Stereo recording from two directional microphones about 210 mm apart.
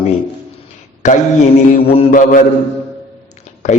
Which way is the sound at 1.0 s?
35° left (ahead or behind).